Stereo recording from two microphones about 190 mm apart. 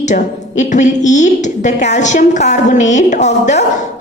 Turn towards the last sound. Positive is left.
turn(degrees=35)  # may be behind; listen again after turning